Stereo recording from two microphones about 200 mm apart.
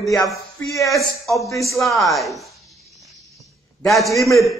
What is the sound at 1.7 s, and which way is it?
Speech, centre (ahead or behind).